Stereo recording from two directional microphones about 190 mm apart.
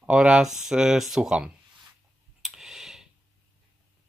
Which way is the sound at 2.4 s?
Centre (ahead or behind).